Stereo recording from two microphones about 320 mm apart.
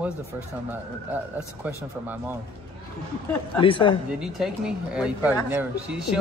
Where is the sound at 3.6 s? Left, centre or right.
Centre.